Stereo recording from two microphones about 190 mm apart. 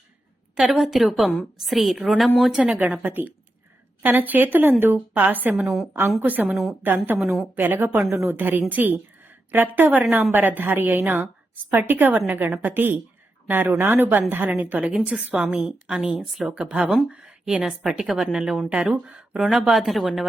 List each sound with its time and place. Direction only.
0.5 s a woman's voice: 5° right (ahead or behind)